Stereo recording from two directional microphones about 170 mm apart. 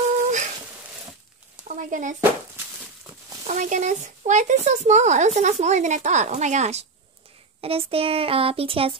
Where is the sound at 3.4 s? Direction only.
45° right (ahead or behind).